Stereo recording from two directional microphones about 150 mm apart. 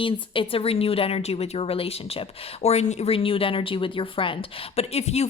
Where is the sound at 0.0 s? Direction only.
35° left (ahead or behind).